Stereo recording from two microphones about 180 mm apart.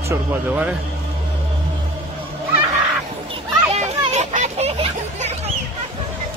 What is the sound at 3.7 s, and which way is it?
Children playing, 40° right (ahead or behind).